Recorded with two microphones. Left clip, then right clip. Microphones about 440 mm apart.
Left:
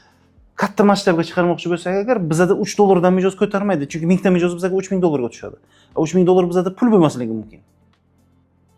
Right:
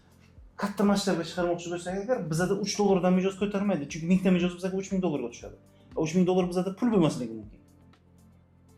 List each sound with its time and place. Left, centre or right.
0.5 s speech: left